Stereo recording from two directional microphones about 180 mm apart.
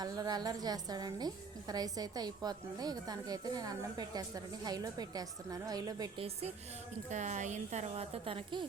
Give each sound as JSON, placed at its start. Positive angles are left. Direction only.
{"t": 0.0, "sound": "a woman's voice", "side_deg": -20}
{"t": 7.1, "sound": "a woman's voice", "side_deg": -40}